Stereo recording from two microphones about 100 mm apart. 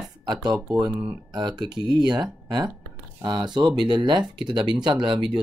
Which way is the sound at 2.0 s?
50° right (ahead or behind).